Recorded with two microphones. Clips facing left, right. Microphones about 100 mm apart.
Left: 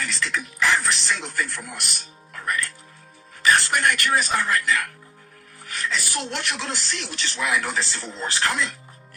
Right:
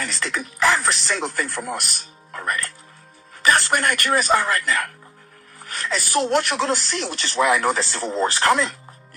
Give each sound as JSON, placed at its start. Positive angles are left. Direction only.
{"t": 0.0, "sound": "a man's voice", "side_deg": -45}